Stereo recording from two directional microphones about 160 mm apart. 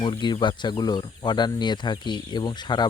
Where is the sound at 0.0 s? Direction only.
30° left (ahead or behind).